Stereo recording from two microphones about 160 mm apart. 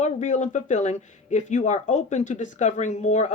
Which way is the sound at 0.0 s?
50° left (ahead or behind).